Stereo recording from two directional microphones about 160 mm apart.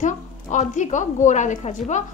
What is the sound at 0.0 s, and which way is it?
A woman's voice, 50° left (ahead or behind).